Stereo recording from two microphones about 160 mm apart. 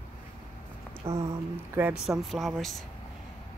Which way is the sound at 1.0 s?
30° right (ahead or behind).